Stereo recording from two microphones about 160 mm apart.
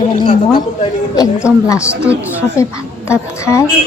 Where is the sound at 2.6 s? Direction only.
20° left (ahead or behind).